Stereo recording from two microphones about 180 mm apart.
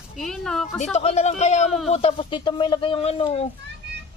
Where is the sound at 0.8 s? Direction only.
35° left (ahead or behind).